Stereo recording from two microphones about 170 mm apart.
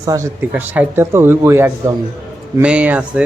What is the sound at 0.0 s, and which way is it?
Speech, 20° right (ahead or behind).